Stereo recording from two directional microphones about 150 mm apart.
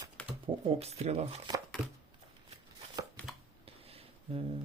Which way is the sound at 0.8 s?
45° right (ahead or behind).